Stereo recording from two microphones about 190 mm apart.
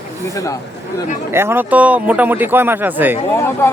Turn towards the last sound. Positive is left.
turn(degrees=15)  # may be behind; listen again after turning